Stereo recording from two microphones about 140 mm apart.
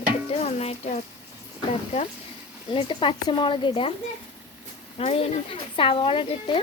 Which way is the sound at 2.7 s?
35° left (ahead or behind).